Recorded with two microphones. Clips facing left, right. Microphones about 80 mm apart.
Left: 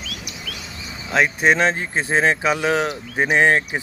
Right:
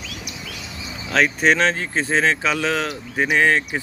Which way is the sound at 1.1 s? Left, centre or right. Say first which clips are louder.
Even; centre.